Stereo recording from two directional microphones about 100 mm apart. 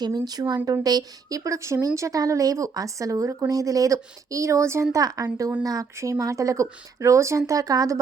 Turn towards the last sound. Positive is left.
turn(degrees=-35)  # may be behind; listen again after turning